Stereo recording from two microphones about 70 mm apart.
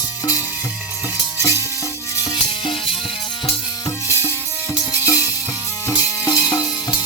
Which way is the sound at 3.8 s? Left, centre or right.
Left.